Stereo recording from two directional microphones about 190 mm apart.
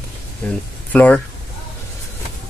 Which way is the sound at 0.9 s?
5° left (ahead or behind).